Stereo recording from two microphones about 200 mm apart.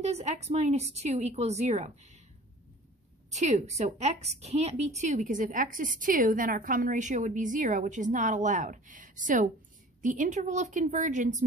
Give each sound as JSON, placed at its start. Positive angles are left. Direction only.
{"t": 0.0, "sound": "a woman's voice", "side_deg": -35}
{"t": 3.3, "sound": "a woman's voice", "side_deg": -35}